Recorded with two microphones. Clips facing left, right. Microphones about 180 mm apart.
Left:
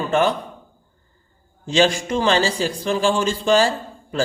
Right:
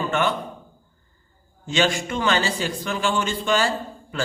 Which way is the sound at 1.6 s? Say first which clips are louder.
Left 4 dB; 35° left (ahead or behind).